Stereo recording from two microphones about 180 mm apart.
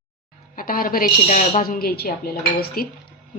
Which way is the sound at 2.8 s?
55° left (ahead or behind).